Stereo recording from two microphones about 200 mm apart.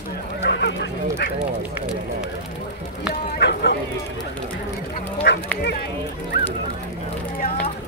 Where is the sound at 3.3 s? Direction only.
60° left (ahead or behind).